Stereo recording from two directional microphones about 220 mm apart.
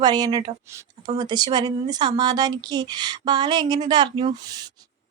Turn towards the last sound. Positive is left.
turn(degrees=-20)  # may be behind; listen again after turning